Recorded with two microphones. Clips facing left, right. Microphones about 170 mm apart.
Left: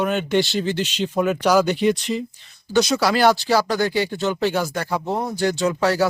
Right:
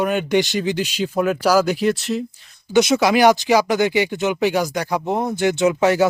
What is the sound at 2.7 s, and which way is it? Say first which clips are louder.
A man's voice: right 3 dB; 20° right (ahead or behind).